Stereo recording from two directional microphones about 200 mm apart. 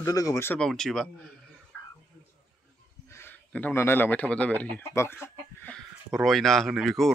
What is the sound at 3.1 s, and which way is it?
Speech, 10° left (ahead or behind).